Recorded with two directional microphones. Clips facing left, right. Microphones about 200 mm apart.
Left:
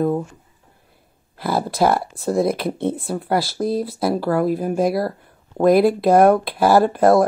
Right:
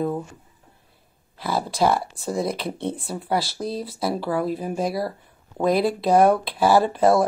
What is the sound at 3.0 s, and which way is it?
Speech, centre (ahead or behind).